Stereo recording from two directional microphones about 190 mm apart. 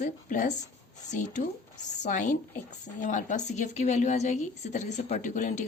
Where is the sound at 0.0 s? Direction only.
40° left (ahead or behind).